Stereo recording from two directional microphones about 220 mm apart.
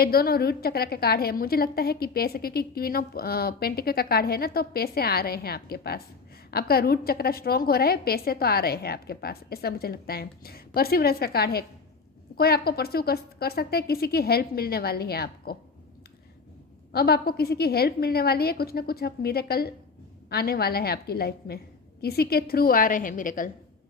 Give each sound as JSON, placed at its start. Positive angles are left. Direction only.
{"t": 0.0, "sound": "a woman's voice", "side_deg": 45}
{"t": 16.9, "sound": "a woman's voice", "side_deg": 45}